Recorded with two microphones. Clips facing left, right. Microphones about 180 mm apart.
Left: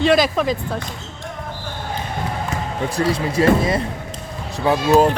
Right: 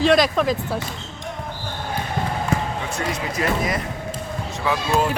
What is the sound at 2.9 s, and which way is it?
Speech, 30° left (ahead or behind).